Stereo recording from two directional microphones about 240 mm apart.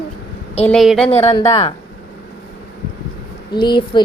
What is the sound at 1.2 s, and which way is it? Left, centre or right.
Speech, left.